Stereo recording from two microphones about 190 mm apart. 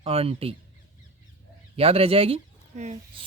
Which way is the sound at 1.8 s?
30° right (ahead or behind).